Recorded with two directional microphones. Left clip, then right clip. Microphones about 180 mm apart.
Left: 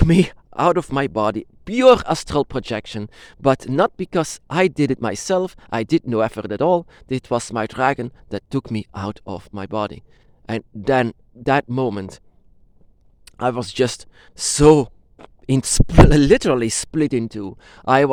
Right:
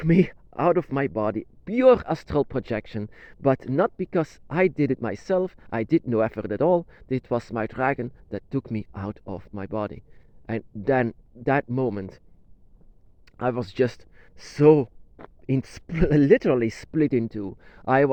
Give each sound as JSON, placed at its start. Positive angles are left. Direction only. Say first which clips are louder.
{"t": 0.0, "sound": "speech", "louder": "left 4 dB", "side_deg": 25}
{"t": 13.2, "sound": "speech", "louder": "left 5 dB", "side_deg": 25}